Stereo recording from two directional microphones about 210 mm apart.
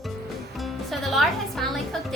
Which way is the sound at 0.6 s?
Centre (ahead or behind).